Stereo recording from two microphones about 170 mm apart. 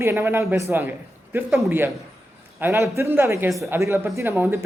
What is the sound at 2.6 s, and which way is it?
Speech, 15° right (ahead or behind).